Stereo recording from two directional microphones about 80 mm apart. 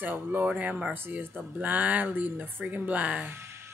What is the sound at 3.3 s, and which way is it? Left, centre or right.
Music, right.